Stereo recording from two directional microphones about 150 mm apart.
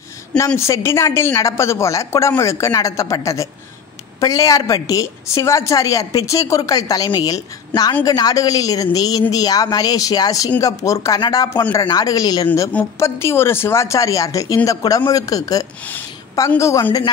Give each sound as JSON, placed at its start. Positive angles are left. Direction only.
{"t": 0.6, "sound": "a woman's voice", "side_deg": 20}